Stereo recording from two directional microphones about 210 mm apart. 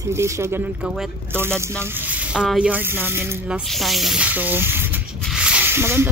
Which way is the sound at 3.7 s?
Centre (ahead or behind).